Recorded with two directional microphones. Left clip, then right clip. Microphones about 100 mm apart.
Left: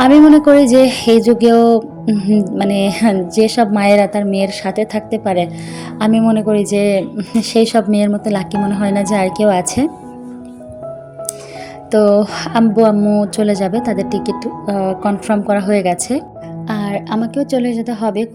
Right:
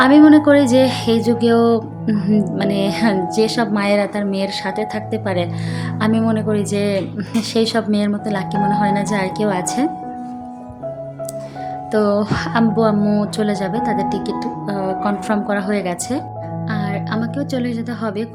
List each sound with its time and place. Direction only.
0.0 s speech: 35° left (ahead or behind)
2.0 s speech: 25° left (ahead or behind)
2.4 s speech: 40° left (ahead or behind)
11.9 s speech: 40° left (ahead or behind)
13.0 s speech: 25° left (ahead or behind)
13.2 s speech: 40° left (ahead or behind)
16.6 s music: 80° left
16.9 s speech: 55° left (ahead or behind)